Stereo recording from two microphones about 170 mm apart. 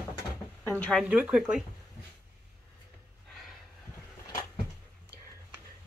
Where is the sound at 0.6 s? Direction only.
10° left (ahead or behind).